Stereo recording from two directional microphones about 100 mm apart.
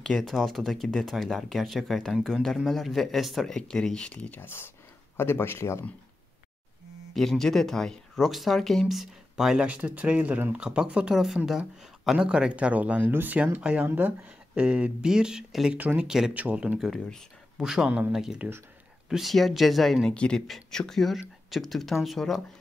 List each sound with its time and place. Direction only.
0.0 s speech: 5° left (ahead or behind); by 5.9 s 25° left (ahead or behind)
7.2 s speech: 5° left (ahead or behind)